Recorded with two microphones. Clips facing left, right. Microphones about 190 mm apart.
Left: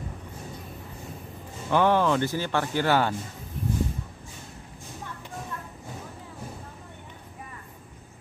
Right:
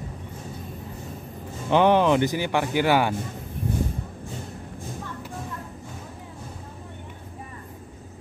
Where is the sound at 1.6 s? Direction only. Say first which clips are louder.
Right 3 dB; 20° right (ahead or behind).